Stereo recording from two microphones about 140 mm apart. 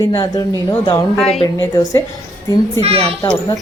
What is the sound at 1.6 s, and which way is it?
Speech, 25° left (ahead or behind).